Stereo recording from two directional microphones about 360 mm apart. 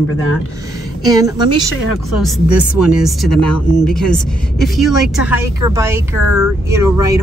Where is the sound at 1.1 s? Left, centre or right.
Centre.